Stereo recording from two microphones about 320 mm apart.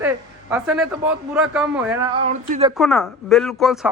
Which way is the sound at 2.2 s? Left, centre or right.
Right.